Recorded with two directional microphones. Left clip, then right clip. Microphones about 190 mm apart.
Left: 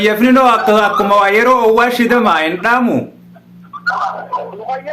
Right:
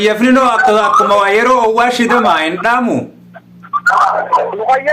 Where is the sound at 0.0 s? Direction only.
Centre (ahead or behind).